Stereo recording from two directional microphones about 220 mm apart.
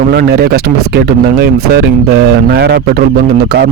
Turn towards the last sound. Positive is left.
turn(degrees=-45)  # may be behind; listen again after turning